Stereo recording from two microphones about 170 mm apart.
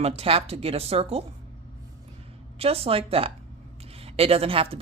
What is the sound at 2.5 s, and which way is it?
Speech, 35° right (ahead or behind).